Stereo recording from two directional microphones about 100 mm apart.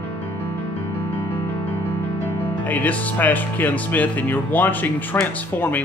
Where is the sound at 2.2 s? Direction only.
15° left (ahead or behind).